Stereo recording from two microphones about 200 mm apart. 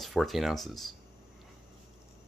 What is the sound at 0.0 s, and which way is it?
Speech, centre (ahead or behind).